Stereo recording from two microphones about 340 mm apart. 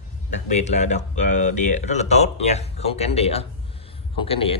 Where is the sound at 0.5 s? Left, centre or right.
Centre.